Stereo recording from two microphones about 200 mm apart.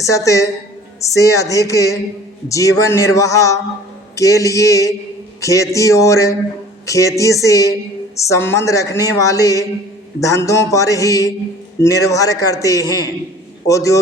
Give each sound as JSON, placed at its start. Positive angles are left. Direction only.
{"t": 0.0, "sound": "a woman's voice", "side_deg": 15}